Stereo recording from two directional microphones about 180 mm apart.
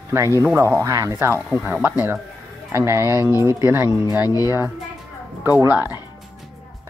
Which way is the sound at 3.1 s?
20° left (ahead or behind).